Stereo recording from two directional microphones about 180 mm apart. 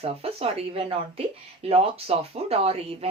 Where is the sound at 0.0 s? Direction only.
35° right (ahead or behind).